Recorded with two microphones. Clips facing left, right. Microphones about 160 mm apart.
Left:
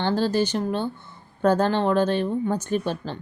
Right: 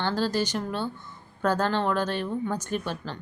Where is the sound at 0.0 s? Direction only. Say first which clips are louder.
Left 4 dB; 15° left (ahead or behind).